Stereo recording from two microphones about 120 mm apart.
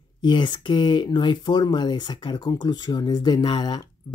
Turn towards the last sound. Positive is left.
turn(degrees=35)  # may be behind; listen again after turning